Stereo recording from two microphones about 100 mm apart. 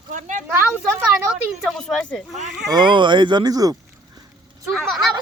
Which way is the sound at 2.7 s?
50° right (ahead or behind).